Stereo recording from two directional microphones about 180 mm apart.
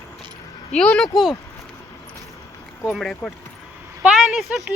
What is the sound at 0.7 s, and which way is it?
Speech, 5° left (ahead or behind).